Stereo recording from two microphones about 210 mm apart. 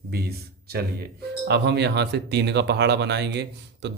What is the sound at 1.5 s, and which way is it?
Speech, 55° right (ahead or behind).